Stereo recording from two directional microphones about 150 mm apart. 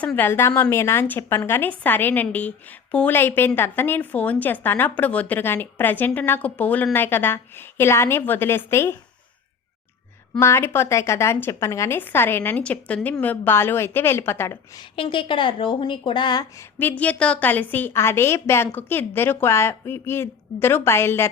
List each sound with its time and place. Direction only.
0.0 s a woman's voice: 10° left (ahead or behind)
10.4 s a woman's voice: 15° left (ahead or behind)
14.8 s speech: 35° left (ahead or behind)
16.7 s a woman's voice: 10° left (ahead or behind)